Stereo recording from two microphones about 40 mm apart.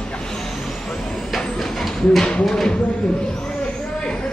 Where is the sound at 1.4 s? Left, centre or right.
Centre.